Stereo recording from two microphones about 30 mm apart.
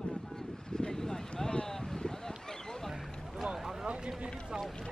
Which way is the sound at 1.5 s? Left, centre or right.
Left.